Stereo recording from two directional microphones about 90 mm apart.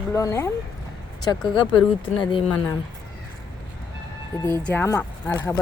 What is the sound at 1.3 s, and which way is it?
Speech, 50° left (ahead or behind).